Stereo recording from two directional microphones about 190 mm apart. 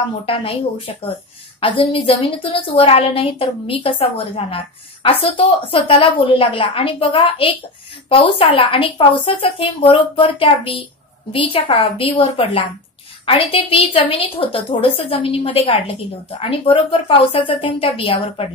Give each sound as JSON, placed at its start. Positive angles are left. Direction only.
{"t": 0.3, "sound": "a woman's voice", "side_deg": 30}